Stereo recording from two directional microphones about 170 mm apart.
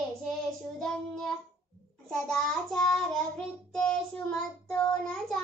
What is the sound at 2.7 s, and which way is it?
Child singing, 5° left (ahead or behind).